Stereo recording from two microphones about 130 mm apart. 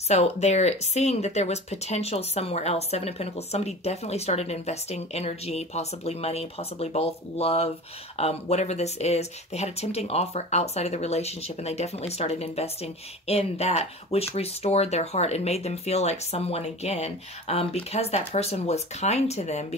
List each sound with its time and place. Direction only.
0.1 s speech: 55° left (ahead or behind)